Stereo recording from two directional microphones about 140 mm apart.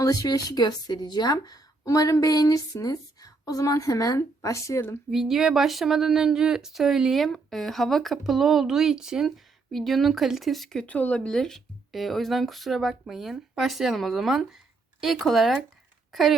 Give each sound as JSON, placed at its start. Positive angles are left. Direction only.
{"t": 0.0, "sound": "speech", "side_deg": 25}
{"t": 5.1, "sound": "speech", "side_deg": -5}